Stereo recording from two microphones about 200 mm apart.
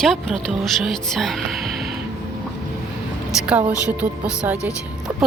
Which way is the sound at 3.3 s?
5° right (ahead or behind).